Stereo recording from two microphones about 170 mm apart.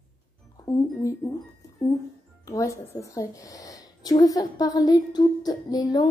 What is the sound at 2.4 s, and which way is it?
A woman's voice, 20° left (ahead or behind).